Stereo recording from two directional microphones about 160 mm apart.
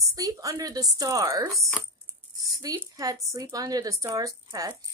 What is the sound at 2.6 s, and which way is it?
Speech, 20° right (ahead or behind).